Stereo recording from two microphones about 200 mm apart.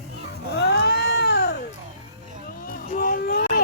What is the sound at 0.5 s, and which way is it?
Cat, 55° left (ahead or behind).